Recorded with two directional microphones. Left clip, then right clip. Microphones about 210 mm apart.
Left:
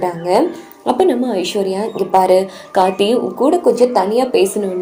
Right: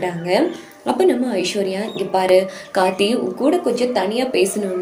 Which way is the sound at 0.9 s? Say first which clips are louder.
Left 3 dB; 5° left (ahead or behind).